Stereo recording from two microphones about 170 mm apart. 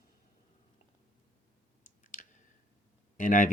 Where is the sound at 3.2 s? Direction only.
50° left (ahead or behind).